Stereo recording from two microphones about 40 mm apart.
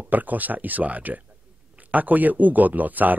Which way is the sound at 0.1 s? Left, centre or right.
Right.